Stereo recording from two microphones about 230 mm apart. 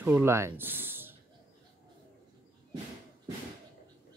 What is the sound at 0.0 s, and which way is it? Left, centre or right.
Speech, centre.